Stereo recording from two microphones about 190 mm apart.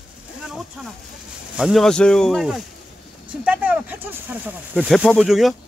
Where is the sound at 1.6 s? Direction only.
Centre (ahead or behind).